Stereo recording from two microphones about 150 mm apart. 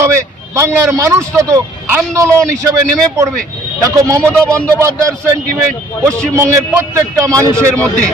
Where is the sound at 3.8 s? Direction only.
20° right (ahead or behind).